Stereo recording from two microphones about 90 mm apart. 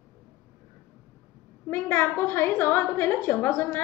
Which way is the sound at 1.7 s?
25° left (ahead or behind).